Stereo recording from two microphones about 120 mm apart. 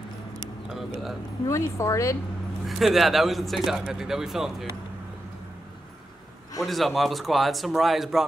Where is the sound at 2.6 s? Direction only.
Centre (ahead or behind).